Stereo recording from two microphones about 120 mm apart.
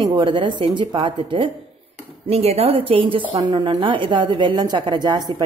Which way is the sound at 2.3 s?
60° right (ahead or behind).